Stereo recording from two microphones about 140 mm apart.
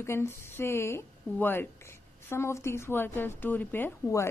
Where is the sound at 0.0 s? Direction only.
20° left (ahead or behind).